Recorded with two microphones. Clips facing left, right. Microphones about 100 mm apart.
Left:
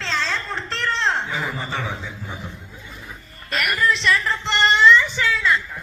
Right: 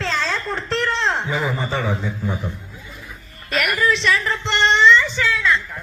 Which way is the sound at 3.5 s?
Centre (ahead or behind).